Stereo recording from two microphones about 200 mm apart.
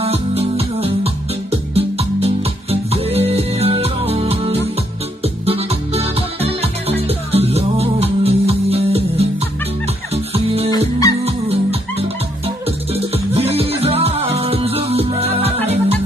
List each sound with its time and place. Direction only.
0.0 s music: 30° right (ahead or behind)